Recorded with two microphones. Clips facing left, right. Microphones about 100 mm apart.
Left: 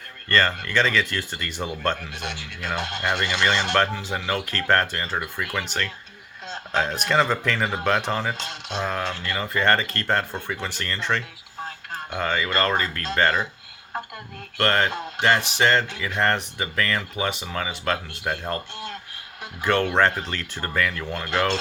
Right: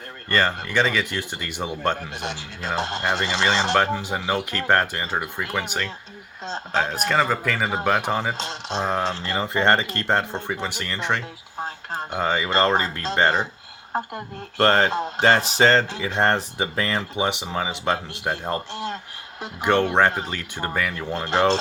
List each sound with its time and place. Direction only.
0.3 s speech: 15° right (ahead or behind)
2.2 s speech: 30° right (ahead or behind)
3.8 s speech: 15° right (ahead or behind)
5.6 s speech: 15° right (ahead or behind)
6.4 s speech: 30° right (ahead or behind)
6.9 s speech: 5° right (ahead or behind); by 18.9 s 30° right (ahead or behind)
19.4 s speech: 20° right (ahead or behind)